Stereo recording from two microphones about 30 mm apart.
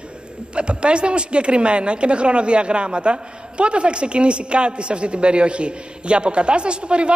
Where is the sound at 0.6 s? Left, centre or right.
Right.